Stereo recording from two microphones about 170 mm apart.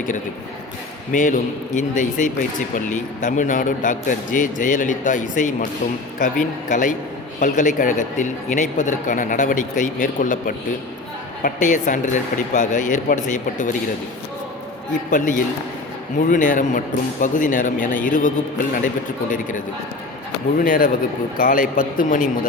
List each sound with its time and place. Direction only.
1.1 s a man's voice: 50° left (ahead or behind)
15.1 s a man's voice: 50° left (ahead or behind)
20.6 s a man's voice: 55° left (ahead or behind)